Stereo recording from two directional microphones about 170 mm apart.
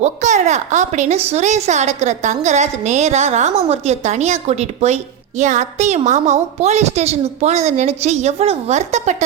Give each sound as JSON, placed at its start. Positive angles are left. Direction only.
{"t": 0.0, "sound": "a woman's voice", "side_deg": -45}